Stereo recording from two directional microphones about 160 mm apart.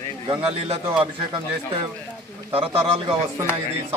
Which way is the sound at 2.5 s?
35° right (ahead or behind).